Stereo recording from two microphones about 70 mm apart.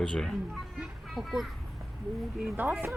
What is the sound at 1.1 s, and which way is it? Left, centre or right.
Speech, centre.